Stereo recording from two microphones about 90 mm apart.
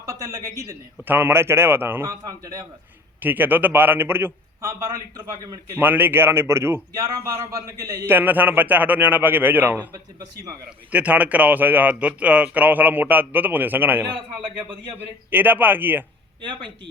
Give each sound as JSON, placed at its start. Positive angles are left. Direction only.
{"t": 0.0, "sound": "a man's voice", "side_deg": -35}
{"t": 1.0, "sound": "speech", "side_deg": -25}
{"t": 2.0, "sound": "speech", "side_deg": -40}
{"t": 3.2, "sound": "speech", "side_deg": -20}
{"t": 4.9, "sound": "speech", "side_deg": -40}
{"t": 5.8, "sound": "speech", "side_deg": -20}
{"t": 8.0, "sound": "speech", "side_deg": -20}
{"t": 9.9, "sound": "speech", "side_deg": -50}
{"t": 10.9, "sound": "speech", "side_deg": -15}